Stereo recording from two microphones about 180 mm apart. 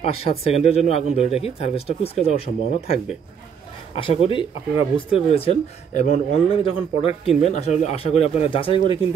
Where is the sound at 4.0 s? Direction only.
30° left (ahead or behind).